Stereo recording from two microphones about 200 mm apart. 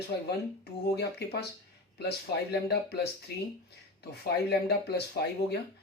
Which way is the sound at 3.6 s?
55° left (ahead or behind).